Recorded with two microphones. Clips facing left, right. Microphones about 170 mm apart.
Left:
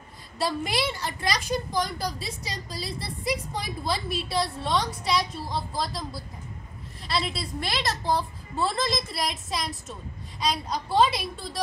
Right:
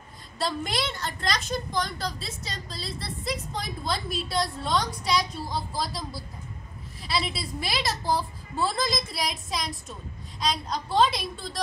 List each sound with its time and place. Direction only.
0.4 s a woman's voice: 5° left (ahead or behind)